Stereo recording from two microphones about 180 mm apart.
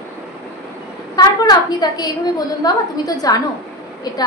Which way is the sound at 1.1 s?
20° left (ahead or behind).